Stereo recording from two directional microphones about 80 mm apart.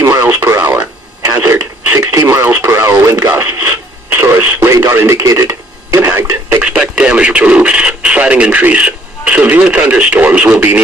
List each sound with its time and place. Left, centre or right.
0.0 s radio: right
1.4 s radio: right
2.0 s radio: right
4.6 s radio: right
6.6 s radio: centre